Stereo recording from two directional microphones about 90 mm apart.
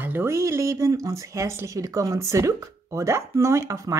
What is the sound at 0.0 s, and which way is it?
A woman's voice, 25° right (ahead or behind).